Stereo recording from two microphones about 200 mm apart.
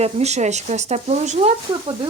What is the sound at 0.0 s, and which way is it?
Speech, 35° right (ahead or behind).